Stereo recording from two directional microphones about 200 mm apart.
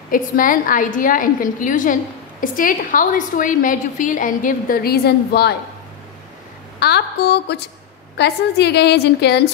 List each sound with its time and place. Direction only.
0.1 s a woman's voice: 45° left (ahead or behind)
6.8 s a woman's voice: 55° left (ahead or behind)